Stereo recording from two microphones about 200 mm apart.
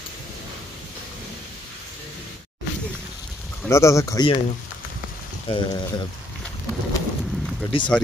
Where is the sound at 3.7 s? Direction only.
15° left (ahead or behind).